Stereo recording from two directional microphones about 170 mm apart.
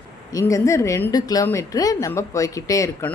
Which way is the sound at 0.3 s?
20° left (ahead or behind).